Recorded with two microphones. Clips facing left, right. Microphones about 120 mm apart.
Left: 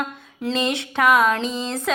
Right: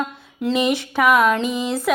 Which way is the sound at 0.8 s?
Centre (ahead or behind).